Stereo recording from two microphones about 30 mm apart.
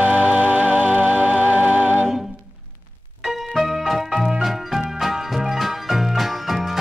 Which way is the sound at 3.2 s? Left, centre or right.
Centre.